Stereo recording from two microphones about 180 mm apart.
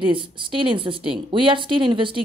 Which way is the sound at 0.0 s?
30° right (ahead or behind).